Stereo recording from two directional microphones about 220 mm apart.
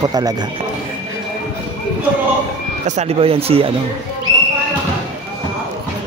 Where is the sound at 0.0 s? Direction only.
15° right (ahead or behind).